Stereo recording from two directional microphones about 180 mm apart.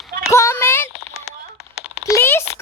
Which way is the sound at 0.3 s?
15° left (ahead or behind).